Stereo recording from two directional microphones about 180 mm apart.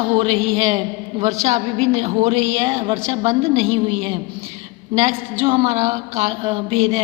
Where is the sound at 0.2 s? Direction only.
30° right (ahead or behind).